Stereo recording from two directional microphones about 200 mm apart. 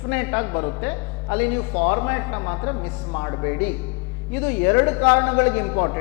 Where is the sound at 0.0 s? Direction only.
15° left (ahead or behind).